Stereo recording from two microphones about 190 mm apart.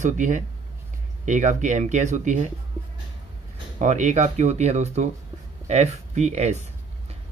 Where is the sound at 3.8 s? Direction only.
40° right (ahead or behind).